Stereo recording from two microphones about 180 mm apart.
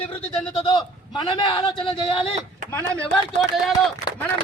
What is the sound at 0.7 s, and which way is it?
A man's voice, 25° left (ahead or behind).